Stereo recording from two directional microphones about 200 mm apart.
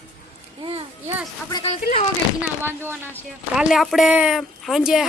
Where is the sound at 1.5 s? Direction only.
30° left (ahead or behind).